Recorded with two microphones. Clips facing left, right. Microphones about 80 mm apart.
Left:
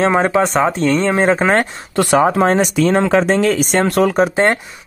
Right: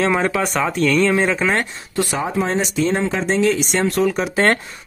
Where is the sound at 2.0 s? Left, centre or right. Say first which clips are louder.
Left 8 dB; left.